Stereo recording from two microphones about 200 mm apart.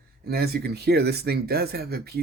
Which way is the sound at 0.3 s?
50° right (ahead or behind).